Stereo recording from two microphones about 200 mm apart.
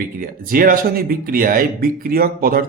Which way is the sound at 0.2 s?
45° right (ahead or behind).